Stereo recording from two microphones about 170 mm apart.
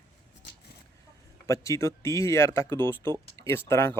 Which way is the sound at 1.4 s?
20° left (ahead or behind).